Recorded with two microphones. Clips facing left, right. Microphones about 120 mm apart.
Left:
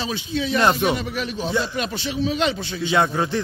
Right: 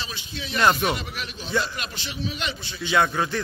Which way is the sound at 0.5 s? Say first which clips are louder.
Left 2 dB; 30° left (ahead or behind).